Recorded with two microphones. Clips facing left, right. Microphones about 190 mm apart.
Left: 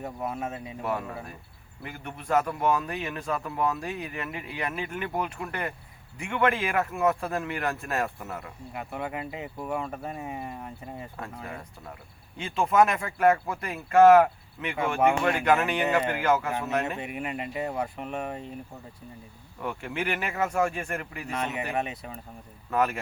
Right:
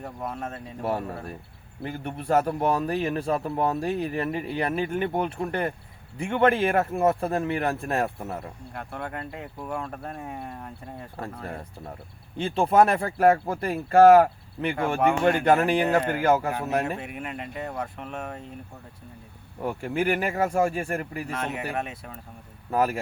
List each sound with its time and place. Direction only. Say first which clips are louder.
0.0 s speech: left 1 dB; 5° left (ahead or behind)
0.8 s speech: right 4 dB; 30° right (ahead or behind)
8.7 s speech: left 2 dB; 5° left (ahead or behind)
12.4 s speech: right 3 dB; 35° right (ahead or behind)
14.8 s speech: even; 5° left (ahead or behind)
15.4 s speech: right 2 dB; 35° right (ahead or behind)
17.0 s speech: left 2 dB; 5° left (ahead or behind)
19.6 s speech: right 5 dB; 35° right (ahead or behind)
21.2 s speech: right 1 dB; centre (ahead or behind)
22.7 s speech: right 2 dB; 35° right (ahead or behind)